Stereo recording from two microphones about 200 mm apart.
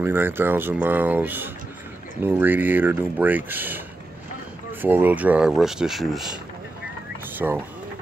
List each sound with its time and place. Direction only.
0.0 s speech: 10° right (ahead or behind)
4.8 s speech: 10° right (ahead or behind)
7.3 s speech: 10° right (ahead or behind)